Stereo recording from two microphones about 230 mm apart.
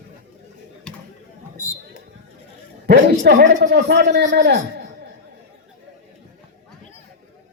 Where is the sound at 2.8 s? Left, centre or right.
Right.